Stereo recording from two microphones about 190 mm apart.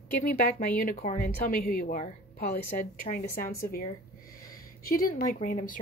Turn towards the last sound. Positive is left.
turn(degrees=40)  # may be behind; listen again after turning